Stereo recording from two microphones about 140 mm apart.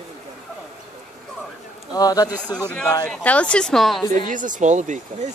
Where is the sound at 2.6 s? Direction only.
10° left (ahead or behind).